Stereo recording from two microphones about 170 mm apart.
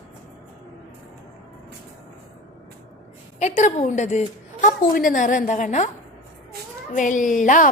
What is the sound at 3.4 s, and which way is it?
A woman's voice, 50° left (ahead or behind).